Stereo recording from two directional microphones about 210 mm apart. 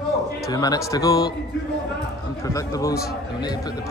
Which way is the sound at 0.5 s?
20° left (ahead or behind).